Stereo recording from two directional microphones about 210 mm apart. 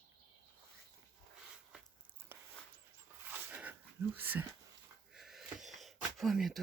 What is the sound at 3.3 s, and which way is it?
Dog, 5° right (ahead or behind).